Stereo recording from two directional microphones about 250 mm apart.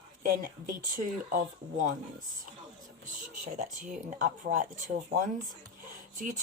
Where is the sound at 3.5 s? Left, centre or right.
Right.